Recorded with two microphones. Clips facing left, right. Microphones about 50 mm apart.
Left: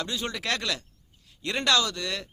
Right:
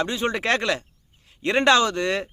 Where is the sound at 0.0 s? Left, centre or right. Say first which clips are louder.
Right 8 dB; right.